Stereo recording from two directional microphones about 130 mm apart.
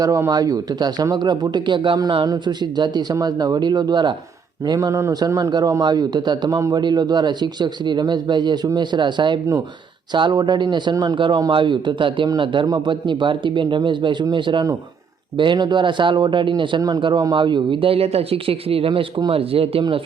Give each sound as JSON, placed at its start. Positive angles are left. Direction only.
{"t": 0.0, "sound": "speech", "side_deg": -25}